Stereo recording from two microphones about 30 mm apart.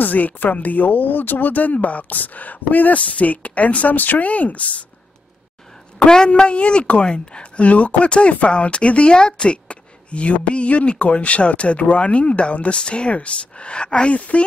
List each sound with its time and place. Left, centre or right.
0.0 s speech: left
4.3 s a woman's voice: left
6.1 s a woman's voice: left
6.5 s speech: left
7.6 s a woman's voice: left
14.1 s a woman's voice: left